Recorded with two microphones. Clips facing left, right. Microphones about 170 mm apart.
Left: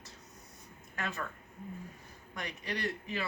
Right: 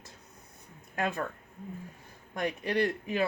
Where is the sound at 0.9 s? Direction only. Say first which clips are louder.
Right 8 dB; 55° right (ahead or behind).